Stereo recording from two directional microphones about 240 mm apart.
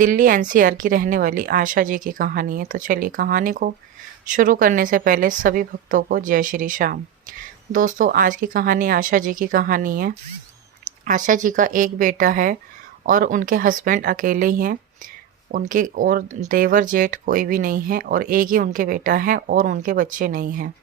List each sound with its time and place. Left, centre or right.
0.0 s speech: right